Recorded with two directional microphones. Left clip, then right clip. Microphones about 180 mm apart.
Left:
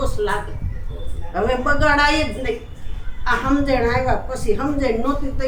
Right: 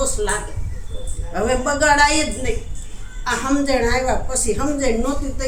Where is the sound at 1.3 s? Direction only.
25° right (ahead or behind).